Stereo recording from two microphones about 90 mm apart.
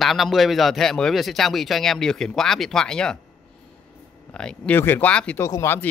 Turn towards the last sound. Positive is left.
turn(degrees=30)  # may be behind; listen again after turning